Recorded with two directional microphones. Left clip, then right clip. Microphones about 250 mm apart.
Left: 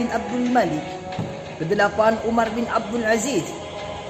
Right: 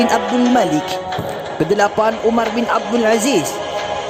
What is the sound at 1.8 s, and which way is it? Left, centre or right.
Speech, right.